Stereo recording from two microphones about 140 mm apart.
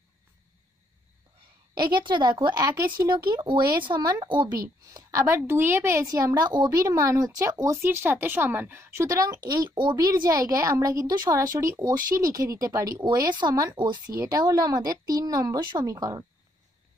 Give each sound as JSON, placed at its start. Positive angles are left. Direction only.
{"t": 1.8, "sound": "speech", "side_deg": -35}
{"t": 4.9, "sound": "a woman's voice", "side_deg": -20}